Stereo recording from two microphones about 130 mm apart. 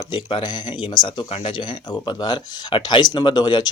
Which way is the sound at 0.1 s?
40° left (ahead or behind).